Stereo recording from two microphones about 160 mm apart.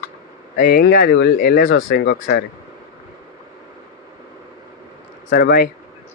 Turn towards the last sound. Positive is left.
turn(degrees=70)  # may be behind; listen again after turning